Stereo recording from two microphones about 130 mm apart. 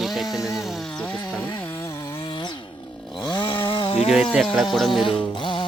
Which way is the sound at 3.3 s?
40° left (ahead or behind).